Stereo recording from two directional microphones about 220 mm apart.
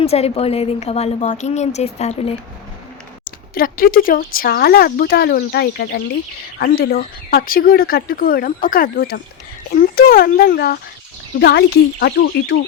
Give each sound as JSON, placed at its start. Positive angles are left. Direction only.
{"t": 0.0, "sound": "a woman's voice", "side_deg": 30}
{"t": 3.5, "sound": "speech", "side_deg": 40}